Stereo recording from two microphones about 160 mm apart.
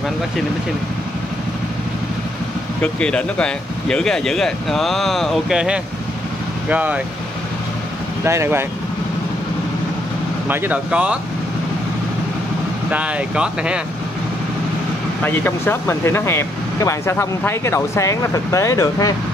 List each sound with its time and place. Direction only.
2.8 s speech: 5° left (ahead or behind); by 7.0 s 10° right (ahead or behind)
8.2 s speech: 15° right (ahead or behind)
10.5 s speech: 10° right (ahead or behind)
12.9 s speech: 5° right (ahead or behind)
15.2 s speech: 15° left (ahead or behind)